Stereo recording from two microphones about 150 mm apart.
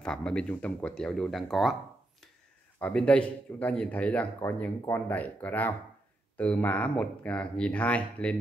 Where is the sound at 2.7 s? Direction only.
10° left (ahead or behind).